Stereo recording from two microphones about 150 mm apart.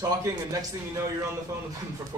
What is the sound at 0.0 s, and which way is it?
Speech, 25° right (ahead or behind).